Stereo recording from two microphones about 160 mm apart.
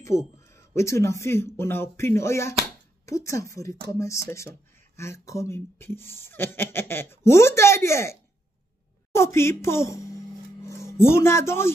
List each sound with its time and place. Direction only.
0.0 s speech: 20° left (ahead or behind)